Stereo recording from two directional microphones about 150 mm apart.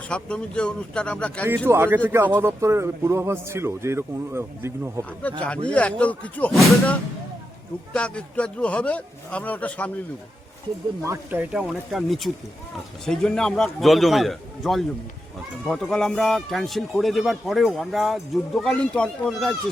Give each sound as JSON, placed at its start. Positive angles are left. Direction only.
{"t": 0.1, "sound": "a man's voice", "side_deg": 5}
{"t": 1.6, "sound": "a man's voice", "side_deg": -15}
{"t": 5.2, "sound": "a man's voice", "side_deg": 10}
{"t": 7.9, "sound": "a man's voice", "side_deg": 10}
{"t": 11.0, "sound": "a man's voice", "side_deg": -15}